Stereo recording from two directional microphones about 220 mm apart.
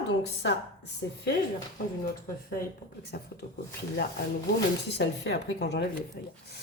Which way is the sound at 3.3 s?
45° left (ahead or behind).